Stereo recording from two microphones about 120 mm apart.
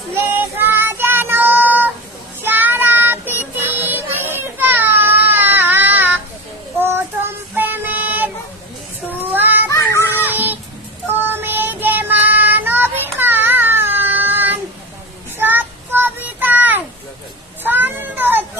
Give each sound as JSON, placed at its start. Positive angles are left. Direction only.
{"t": 0.3, "sound": "child singing", "side_deg": -15}
{"t": 9.6, "sound": "child singing", "side_deg": 25}
{"t": 10.1, "sound": "child singing", "side_deg": -15}